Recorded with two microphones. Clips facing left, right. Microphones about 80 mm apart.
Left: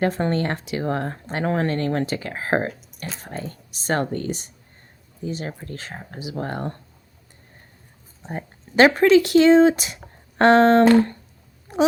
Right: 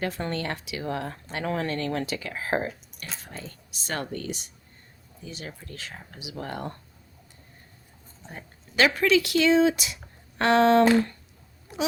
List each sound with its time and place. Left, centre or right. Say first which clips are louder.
0.0 s speech: left 8 dB; left
8.2 s speech: left 11 dB; left